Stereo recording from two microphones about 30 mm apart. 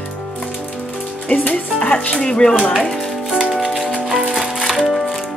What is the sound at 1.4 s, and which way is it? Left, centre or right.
Music, left.